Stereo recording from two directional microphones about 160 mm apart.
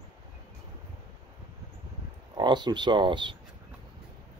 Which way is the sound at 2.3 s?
30° right (ahead or behind).